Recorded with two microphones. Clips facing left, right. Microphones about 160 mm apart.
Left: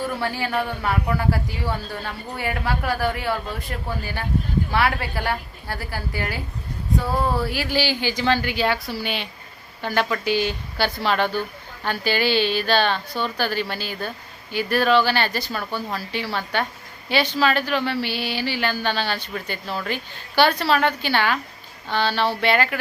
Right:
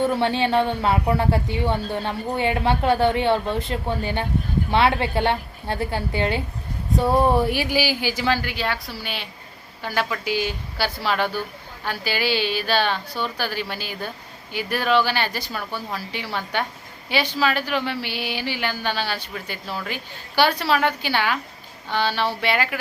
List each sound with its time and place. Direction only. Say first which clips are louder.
0.0 s a woman's voice: right 5 dB; 25° right (ahead or behind)